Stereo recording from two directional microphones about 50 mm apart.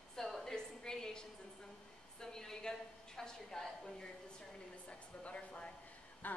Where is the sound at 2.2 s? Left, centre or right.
Centre.